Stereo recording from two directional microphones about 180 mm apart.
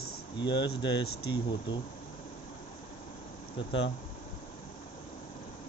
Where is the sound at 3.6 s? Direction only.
30° left (ahead or behind).